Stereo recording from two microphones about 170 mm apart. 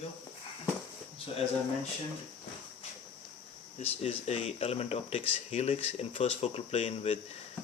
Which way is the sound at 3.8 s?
35° left (ahead or behind).